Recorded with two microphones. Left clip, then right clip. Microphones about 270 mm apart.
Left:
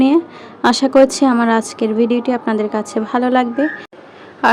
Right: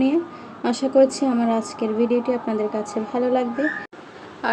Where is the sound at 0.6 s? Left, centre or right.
Left.